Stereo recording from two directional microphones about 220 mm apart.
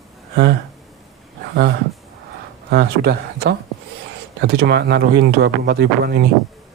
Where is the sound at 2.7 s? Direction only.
45° right (ahead or behind).